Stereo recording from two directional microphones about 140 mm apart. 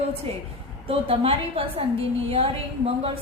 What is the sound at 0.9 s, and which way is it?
A woman's voice, 45° right (ahead or behind).